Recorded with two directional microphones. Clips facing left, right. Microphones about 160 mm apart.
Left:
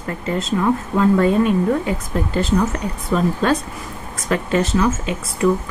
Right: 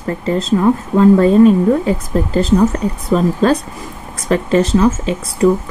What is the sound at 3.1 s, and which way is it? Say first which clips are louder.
A woman's voice: right 4 dB; 35° right (ahead or behind).